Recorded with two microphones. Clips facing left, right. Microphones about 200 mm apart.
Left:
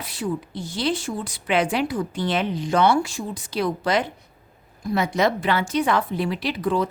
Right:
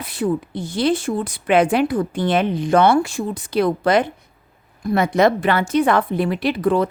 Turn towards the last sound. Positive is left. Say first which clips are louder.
# right 5 dB
turn(degrees=-55)  # may be behind; listen again after turning